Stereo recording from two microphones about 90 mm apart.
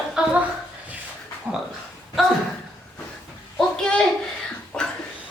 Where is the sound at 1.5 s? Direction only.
15° right (ahead or behind).